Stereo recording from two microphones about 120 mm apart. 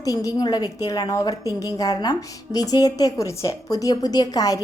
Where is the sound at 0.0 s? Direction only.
30° left (ahead or behind).